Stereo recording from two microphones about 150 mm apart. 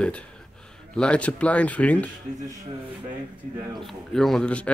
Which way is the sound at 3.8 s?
Centre (ahead or behind).